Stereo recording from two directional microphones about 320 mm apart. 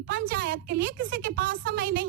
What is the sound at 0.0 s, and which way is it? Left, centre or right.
A woman's voice, right.